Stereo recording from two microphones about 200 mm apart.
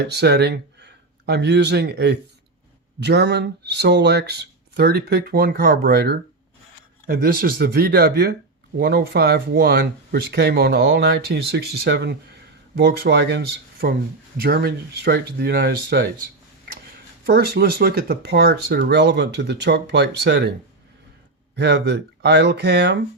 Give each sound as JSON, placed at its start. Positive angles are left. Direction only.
{"t": 0.0, "sound": "speech", "side_deg": -55}
{"t": 17.2, "sound": "speech", "side_deg": -50}
{"t": 21.5, "sound": "speech", "side_deg": -60}